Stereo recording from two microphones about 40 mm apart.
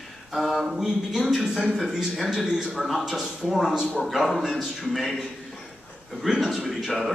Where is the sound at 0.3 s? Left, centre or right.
Centre.